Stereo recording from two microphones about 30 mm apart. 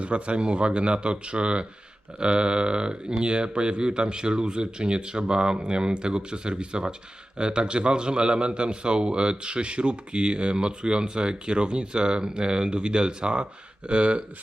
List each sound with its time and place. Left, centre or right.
0.0 s speech: right